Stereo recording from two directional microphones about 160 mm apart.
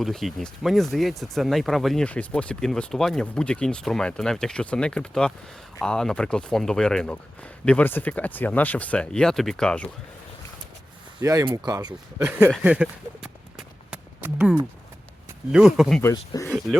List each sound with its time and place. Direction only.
0.0 s speech: centre (ahead or behind)
11.2 s speech: 20° right (ahead or behind)
12.2 s speech: 10° right (ahead or behind)
12.6 s clip-clop: 5° right (ahead or behind)
14.3 s speech: 5° right (ahead or behind)
16.0 s speech: 15° left (ahead or behind)